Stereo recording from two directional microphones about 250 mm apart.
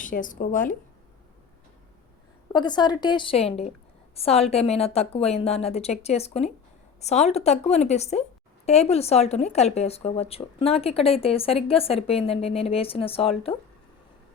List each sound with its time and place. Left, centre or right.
0.0 s speech: left
2.5 s a woman's voice: centre